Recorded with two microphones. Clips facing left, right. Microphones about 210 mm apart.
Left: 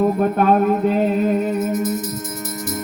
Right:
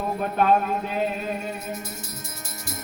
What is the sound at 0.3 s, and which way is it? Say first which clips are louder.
Music: left 6 dB; 45° left (ahead or behind).